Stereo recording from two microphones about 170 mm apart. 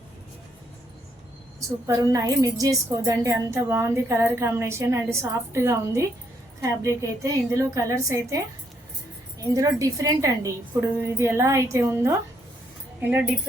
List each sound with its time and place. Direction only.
1.5 s a woman's voice: 20° right (ahead or behind)
9.6 s a woman's voice: 20° right (ahead or behind)